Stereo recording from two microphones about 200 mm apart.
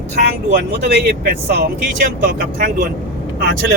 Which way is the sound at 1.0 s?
50° right (ahead or behind).